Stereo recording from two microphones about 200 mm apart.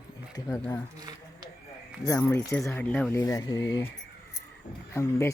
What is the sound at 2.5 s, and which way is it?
Speech, 5° left (ahead or behind).